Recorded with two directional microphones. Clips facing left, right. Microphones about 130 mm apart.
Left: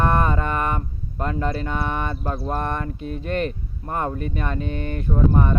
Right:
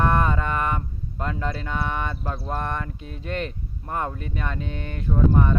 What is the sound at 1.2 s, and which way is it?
Mantra, 50° left (ahead or behind).